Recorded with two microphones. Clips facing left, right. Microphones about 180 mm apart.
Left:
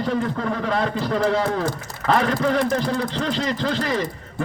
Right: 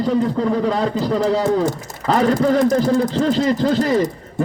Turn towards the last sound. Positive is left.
turn(degrees=-40)  # may be behind; listen again after turning